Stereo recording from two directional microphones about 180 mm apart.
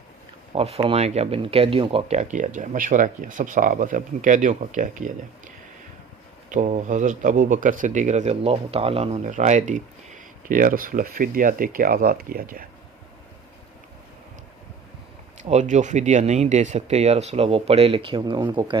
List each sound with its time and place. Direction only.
0.5 s speech: 35° right (ahead or behind)
2.3 s speech: 45° right (ahead or behind)
15.4 s speech: 40° right (ahead or behind); by 18.8 s 25° right (ahead or behind)